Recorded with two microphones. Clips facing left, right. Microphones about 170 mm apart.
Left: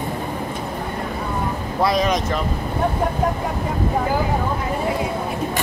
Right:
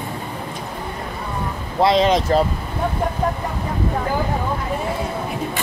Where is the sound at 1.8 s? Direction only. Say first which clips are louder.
Right 4 dB; 25° right (ahead or behind).